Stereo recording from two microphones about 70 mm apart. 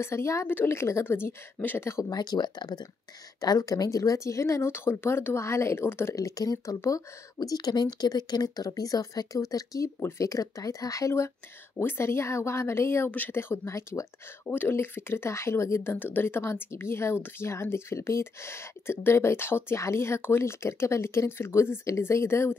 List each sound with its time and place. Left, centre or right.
0.0 s speech: left
2.0 s speech: left
3.3 s speech: left
6.1 s speech: left
7.3 s speech: left
10.0 s speech: left
14.4 s speech: left
15.9 s speech: left